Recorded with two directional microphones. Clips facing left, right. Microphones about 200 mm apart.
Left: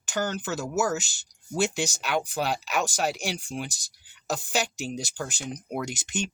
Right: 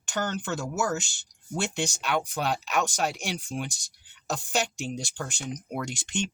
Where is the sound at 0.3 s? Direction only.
5° left (ahead or behind).